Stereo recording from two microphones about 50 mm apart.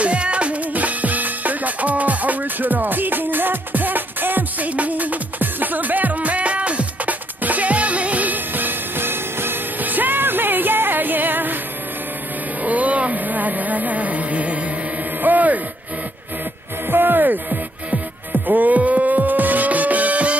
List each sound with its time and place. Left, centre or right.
0.0 s music: right
12.6 s a sound: right
16.8 s music: right